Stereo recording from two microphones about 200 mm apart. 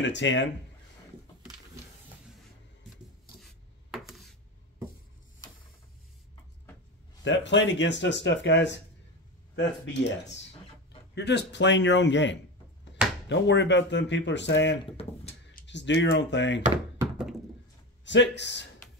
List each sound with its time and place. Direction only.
0.0 s speech: 65° left (ahead or behind)
3.3 s a sound: centre (ahead or behind)
7.2 s speech: 65° left (ahead or behind)
15.0 s speech: 30° left (ahead or behind)
15.6 s speech: 60° left (ahead or behind)
17.0 s thunk: 5° right (ahead or behind)
18.0 s speech: 60° left (ahead or behind)